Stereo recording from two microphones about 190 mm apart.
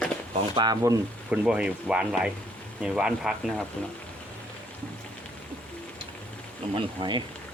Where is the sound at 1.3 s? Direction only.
5° right (ahead or behind).